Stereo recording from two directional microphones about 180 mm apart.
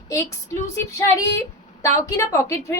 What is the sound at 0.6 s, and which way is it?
A woman's voice, 15° left (ahead or behind).